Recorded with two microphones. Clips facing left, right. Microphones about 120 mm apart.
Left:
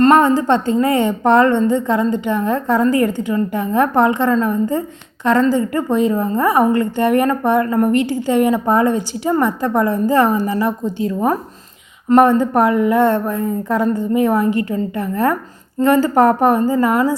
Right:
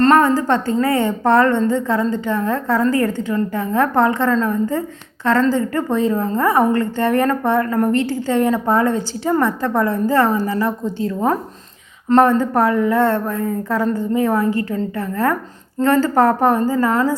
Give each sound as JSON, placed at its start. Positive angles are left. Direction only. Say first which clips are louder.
{"t": 0.0, "sound": "a woman's voice", "louder": "left 2 dB", "side_deg": 20}